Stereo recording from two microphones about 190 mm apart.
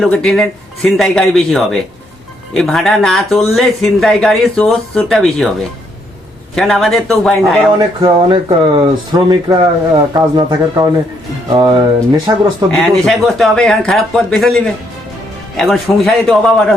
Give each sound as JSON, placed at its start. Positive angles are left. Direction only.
{"t": 0.0, "sound": "speech", "side_deg": 0}
{"t": 6.6, "sound": "speech", "side_deg": 0}
{"t": 7.8, "sound": "speech", "side_deg": -25}
{"t": 10.2, "sound": "speech", "side_deg": -20}
{"t": 12.7, "sound": "speech", "side_deg": 0}